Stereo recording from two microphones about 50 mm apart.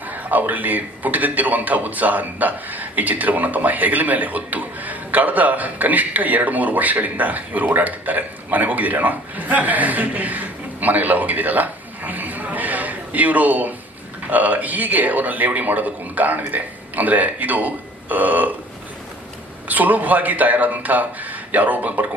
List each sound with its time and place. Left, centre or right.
0.1 s speech: right
19.6 s speech: right